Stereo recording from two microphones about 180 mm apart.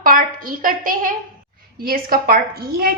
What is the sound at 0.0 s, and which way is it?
A woman's voice, 50° right (ahead or behind).